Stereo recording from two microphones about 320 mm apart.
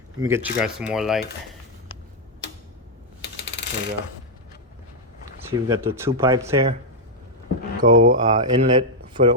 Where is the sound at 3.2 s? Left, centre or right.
Left.